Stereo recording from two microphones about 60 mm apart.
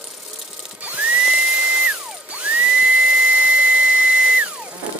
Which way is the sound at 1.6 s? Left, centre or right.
Centre.